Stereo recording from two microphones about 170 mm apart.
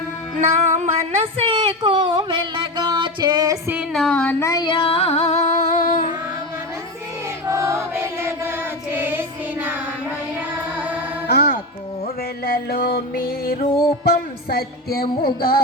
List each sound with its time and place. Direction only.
0.3 s music: 45° right (ahead or behind)
1.4 s a sound: 35° right (ahead or behind)
3.8 s music: centre (ahead or behind); by 6.1 s 55° left (ahead or behind)
7.4 s female singing: 15° right (ahead or behind)
11.3 s music: 70° left (ahead or behind)